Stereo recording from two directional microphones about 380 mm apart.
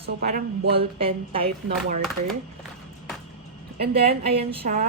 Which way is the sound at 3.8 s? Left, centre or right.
Centre.